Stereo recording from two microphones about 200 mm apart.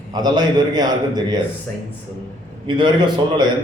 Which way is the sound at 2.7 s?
25° right (ahead or behind).